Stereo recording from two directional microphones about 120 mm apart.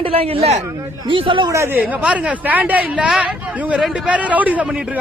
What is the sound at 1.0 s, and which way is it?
Speech, 45° right (ahead or behind).